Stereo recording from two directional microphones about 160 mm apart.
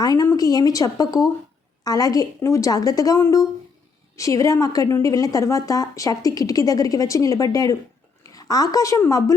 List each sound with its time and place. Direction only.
0.0 s a woman's voice: 20° left (ahead or behind)